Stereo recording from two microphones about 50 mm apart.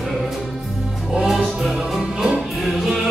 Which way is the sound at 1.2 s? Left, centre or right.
Centre.